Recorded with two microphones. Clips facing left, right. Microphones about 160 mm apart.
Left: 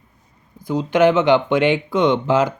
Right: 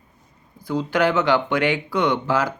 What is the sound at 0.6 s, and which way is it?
Speech, 20° left (ahead or behind).